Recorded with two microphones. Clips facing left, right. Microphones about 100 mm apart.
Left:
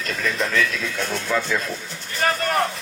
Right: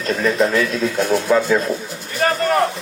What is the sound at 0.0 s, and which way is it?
A man's voice, 35° right (ahead or behind).